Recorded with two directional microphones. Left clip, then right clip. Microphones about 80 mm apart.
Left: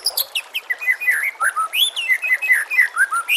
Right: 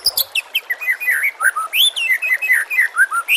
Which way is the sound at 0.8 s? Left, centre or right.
Right.